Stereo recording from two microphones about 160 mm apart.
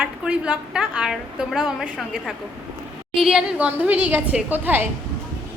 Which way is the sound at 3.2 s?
5° right (ahead or behind).